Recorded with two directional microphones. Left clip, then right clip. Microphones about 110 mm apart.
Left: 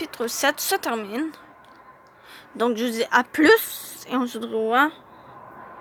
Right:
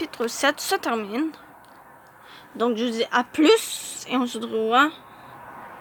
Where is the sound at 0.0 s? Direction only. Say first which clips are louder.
Even; 10° right (ahead or behind).